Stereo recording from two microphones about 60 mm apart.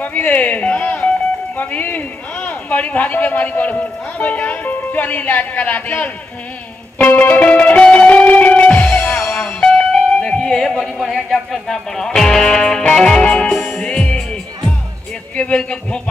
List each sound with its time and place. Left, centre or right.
0.0 s a man's voice: left
7.0 s music: left; by 11.1 s centre
11.1 s speech: centre